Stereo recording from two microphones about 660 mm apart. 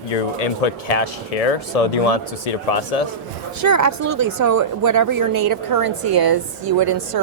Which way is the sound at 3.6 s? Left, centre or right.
Right.